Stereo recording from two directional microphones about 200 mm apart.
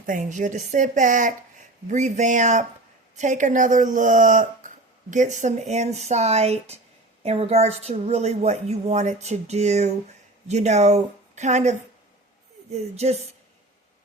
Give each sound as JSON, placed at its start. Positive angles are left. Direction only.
{"t": 0.0, "sound": "a woman's voice", "side_deg": -40}